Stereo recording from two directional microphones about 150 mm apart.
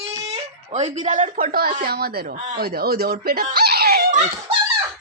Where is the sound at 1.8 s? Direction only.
90° right.